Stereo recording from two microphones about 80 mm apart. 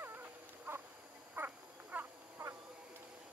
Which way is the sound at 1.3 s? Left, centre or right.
Right.